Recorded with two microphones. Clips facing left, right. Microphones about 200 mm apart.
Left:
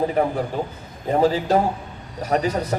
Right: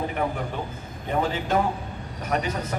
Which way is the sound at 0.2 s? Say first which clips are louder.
Left 6 dB; 35° left (ahead or behind).